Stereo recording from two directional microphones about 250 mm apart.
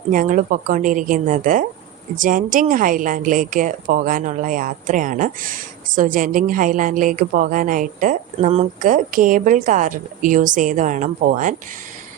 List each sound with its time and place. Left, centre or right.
0.1 s a woman's voice: right